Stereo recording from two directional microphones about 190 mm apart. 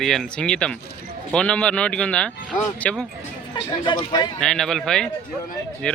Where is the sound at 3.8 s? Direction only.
25° left (ahead or behind).